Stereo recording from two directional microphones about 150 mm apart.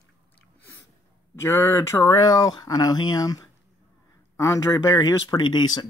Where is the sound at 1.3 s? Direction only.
15° left (ahead or behind).